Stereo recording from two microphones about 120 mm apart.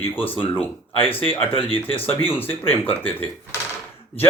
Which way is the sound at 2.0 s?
15° left (ahead or behind).